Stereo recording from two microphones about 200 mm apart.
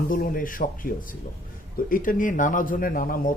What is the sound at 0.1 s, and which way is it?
Speech, 45° left (ahead or behind).